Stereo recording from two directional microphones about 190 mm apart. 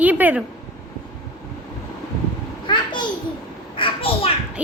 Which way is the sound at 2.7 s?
25° left (ahead or behind).